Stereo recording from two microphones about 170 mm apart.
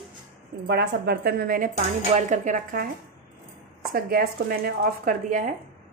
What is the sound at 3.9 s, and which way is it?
Speech, 65° right (ahead or behind).